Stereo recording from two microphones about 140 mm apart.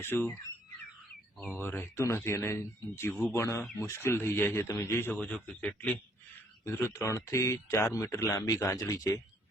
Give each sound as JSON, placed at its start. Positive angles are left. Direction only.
{"t": 0.0, "sound": "a man's voice", "side_deg": 15}
{"t": 1.5, "sound": "a man's voice", "side_deg": 15}